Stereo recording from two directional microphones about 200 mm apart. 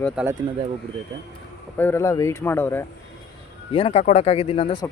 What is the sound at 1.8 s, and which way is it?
Speech, 10° left (ahead or behind).